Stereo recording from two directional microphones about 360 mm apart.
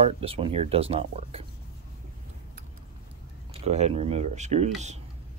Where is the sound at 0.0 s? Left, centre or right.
Centre.